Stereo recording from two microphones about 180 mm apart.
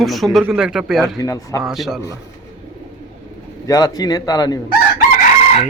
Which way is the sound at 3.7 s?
20° left (ahead or behind).